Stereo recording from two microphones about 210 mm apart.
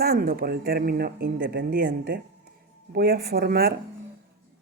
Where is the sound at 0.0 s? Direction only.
45° right (ahead or behind).